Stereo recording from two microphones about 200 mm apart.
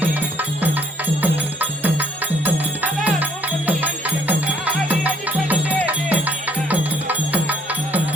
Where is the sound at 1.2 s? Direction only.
10° right (ahead or behind).